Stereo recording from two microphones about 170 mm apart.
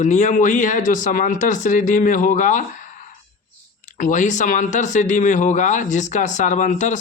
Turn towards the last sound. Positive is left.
turn(degrees=45)  # may be behind; listen again after turning